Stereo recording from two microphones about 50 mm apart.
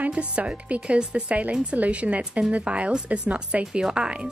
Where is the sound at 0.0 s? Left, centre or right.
Right.